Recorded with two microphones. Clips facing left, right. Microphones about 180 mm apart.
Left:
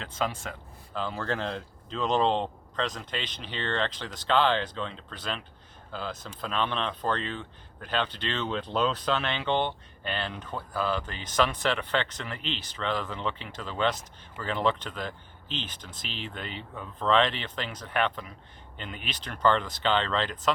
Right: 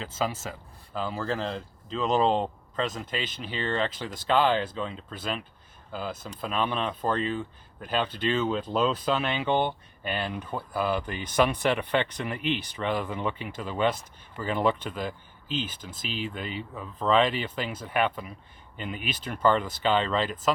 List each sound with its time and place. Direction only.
0.0 s speech: 5° right (ahead or behind)